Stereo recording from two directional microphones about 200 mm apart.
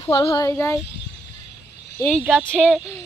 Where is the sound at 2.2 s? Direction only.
5° right (ahead or behind).